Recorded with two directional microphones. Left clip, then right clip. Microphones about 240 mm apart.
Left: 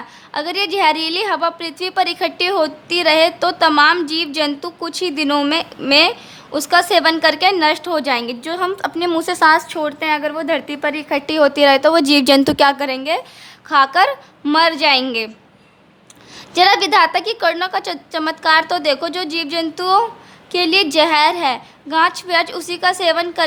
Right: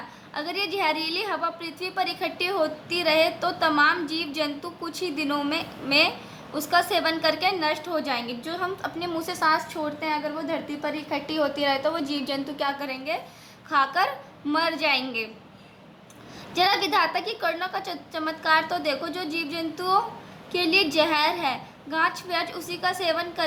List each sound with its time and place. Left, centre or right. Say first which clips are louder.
0.3 s a woman's voice: left 9 dB; left
16.6 s a woman's voice: left 10 dB; left